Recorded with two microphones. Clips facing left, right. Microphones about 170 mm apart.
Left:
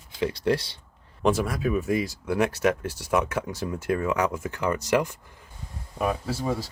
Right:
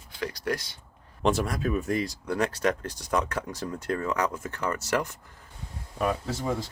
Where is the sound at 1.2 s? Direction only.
Centre (ahead or behind).